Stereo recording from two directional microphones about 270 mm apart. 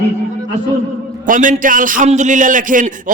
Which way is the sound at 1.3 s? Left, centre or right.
Right.